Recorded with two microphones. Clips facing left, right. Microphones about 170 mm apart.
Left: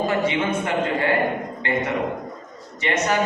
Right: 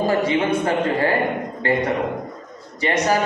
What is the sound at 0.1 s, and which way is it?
A man's voice, 35° right (ahead or behind).